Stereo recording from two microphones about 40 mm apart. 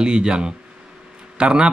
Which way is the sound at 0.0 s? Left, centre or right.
Right.